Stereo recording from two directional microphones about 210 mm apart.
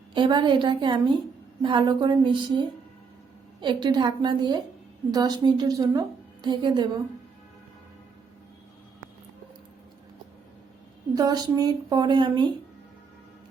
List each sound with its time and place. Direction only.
0.1 s a woman's voice: 20° right (ahead or behind)
11.1 s a woman's voice: 20° right (ahead or behind)